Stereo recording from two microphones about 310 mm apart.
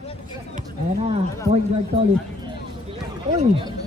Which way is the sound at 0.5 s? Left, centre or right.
Right.